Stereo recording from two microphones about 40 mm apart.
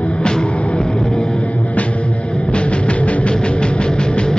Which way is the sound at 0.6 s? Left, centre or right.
Left.